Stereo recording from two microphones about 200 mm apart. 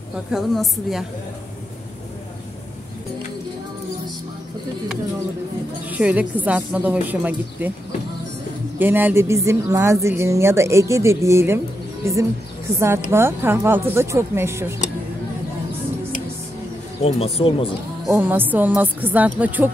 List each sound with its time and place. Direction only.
0.3 s a woman's voice: centre (ahead or behind)
5.9 s a woman's voice: 5° right (ahead or behind)
8.7 s a woman's voice: 10° right (ahead or behind)
17.0 s speech: 30° left (ahead or behind)
18.0 s a woman's voice: 10° right (ahead or behind)